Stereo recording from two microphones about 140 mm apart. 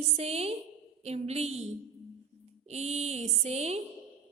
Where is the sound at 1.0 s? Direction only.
50° right (ahead or behind).